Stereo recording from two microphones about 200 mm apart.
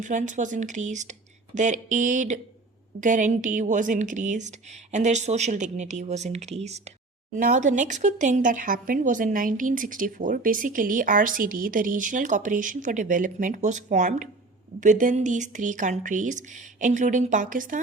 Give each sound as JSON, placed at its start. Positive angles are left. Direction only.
{"t": 0.0, "sound": "speech", "side_deg": -40}